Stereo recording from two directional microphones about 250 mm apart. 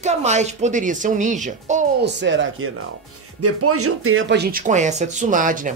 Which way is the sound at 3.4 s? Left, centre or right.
Right.